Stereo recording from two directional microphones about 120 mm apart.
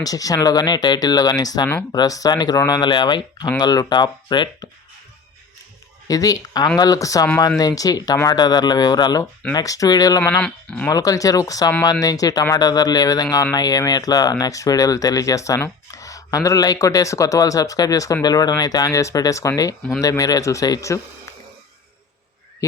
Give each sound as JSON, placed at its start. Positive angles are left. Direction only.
{"t": 0.0, "sound": "speech", "side_deg": 30}
{"t": 6.1, "sound": "speech", "side_deg": 30}
{"t": 10.2, "sound": "speech", "side_deg": 10}
{"t": 10.8, "sound": "speech", "side_deg": 30}